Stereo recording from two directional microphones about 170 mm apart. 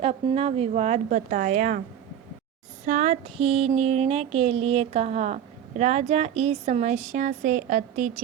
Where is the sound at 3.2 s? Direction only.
35° right (ahead or behind).